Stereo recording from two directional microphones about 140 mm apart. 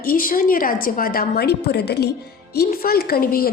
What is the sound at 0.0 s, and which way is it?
A woman's voice, 90° left.